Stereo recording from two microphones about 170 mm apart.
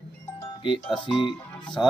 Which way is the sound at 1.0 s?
30° left (ahead or behind).